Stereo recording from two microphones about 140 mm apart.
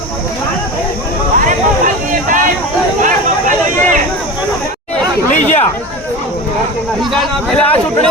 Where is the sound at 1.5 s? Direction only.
70° right (ahead or behind).